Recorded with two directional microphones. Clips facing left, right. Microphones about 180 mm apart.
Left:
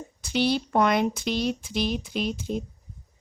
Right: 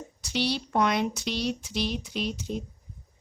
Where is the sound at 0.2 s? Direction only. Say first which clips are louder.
Left 5 dB; 55° left (ahead or behind).